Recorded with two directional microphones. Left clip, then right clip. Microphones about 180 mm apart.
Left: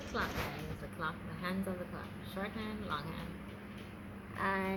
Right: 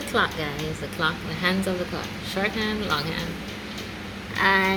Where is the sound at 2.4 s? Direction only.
20° right (ahead or behind).